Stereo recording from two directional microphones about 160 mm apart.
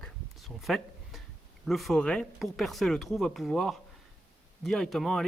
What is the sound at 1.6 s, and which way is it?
Speech, centre (ahead or behind).